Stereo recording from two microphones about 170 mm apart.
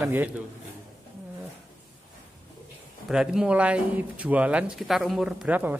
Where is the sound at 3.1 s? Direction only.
5° right (ahead or behind).